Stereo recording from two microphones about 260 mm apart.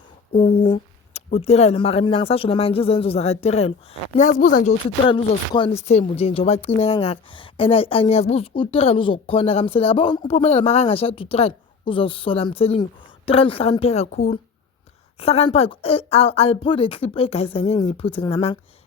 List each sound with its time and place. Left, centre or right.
0.3 s speech: left
15.2 s speech: left